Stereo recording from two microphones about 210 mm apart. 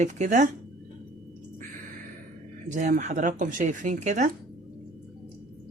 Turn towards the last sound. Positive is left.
turn(degrees=-35)  # may be behind; listen again after turning